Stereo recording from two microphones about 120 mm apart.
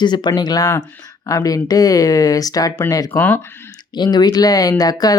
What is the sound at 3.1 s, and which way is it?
Speech, 10° left (ahead or behind).